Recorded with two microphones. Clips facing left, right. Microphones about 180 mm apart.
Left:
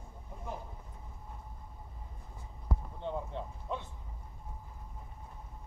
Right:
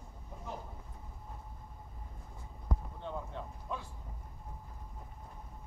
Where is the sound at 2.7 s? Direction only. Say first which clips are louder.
Even; 5° left (ahead or behind).